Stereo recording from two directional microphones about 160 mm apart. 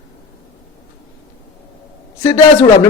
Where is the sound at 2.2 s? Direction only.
20° left (ahead or behind).